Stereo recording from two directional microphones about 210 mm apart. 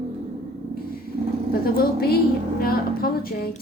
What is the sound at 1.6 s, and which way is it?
A woman's voice, 45° left (ahead or behind).